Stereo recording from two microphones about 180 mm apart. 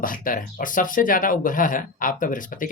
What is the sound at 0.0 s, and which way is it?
Speech, 50° left (ahead or behind).